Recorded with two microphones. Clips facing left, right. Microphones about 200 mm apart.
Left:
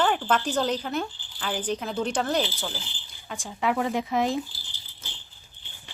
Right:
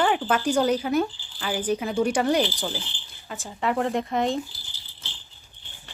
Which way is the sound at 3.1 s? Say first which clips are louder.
Even; centre (ahead or behind).